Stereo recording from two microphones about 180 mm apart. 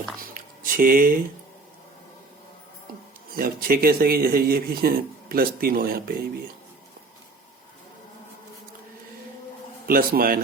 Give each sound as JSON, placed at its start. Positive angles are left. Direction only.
{"t": 0.2, "sound": "a sound", "side_deg": -50}
{"t": 3.3, "sound": "speech", "side_deg": -55}
{"t": 9.8, "sound": "speech", "side_deg": -55}